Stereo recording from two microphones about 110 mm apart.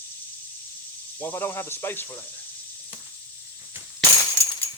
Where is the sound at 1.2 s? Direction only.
20° left (ahead or behind).